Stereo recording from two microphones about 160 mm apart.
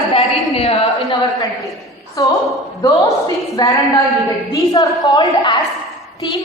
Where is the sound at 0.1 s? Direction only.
35° left (ahead or behind).